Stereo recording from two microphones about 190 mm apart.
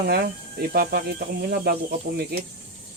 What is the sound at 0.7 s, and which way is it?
Speech, 50° right (ahead or behind).